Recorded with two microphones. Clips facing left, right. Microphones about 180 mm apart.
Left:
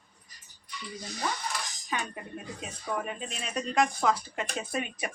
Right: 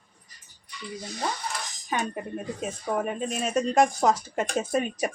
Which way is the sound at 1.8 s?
40° right (ahead or behind).